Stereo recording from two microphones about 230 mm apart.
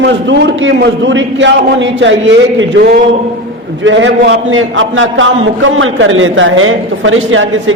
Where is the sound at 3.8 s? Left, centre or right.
Right.